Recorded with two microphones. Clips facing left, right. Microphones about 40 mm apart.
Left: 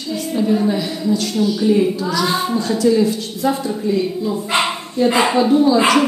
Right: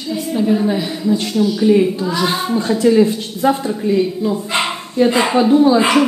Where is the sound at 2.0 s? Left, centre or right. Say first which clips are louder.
Right 1 dB; right.